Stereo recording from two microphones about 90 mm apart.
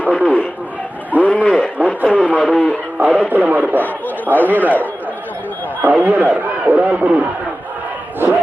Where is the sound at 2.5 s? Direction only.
15° left (ahead or behind).